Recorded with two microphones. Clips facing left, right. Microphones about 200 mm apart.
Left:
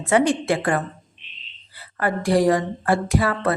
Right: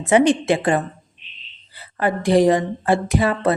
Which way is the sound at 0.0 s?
20° right (ahead or behind).